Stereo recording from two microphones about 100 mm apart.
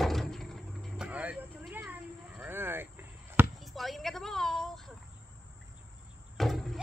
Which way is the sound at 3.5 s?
Centre (ahead or behind).